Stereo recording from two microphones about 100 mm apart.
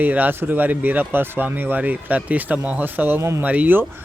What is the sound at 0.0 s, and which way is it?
Speech, 15° right (ahead or behind).